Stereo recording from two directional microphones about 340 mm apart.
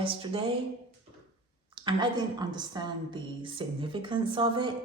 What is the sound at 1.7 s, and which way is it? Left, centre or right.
A woman's voice, centre.